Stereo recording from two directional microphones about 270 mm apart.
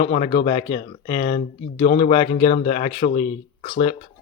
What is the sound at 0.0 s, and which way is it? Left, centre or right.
Speech, centre.